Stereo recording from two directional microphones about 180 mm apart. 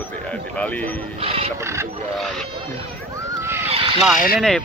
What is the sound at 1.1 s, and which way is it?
Music, 35° right (ahead or behind).